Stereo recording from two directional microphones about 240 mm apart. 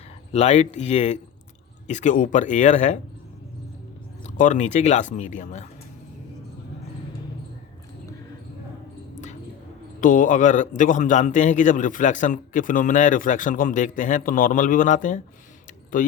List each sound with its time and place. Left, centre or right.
0.3 s a man's voice: left
4.2 s a man's voice: left
10.0 s a man's voice: left